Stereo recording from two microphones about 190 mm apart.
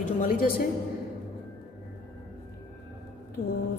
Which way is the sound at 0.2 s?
50° left (ahead or behind).